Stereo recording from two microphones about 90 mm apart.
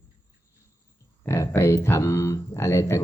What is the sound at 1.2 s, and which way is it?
Speech, 30° left (ahead or behind).